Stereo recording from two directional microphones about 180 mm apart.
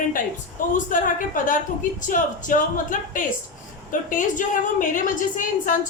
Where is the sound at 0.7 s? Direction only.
45° left (ahead or behind).